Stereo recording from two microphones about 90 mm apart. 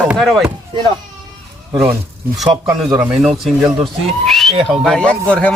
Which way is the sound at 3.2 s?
Centre (ahead or behind).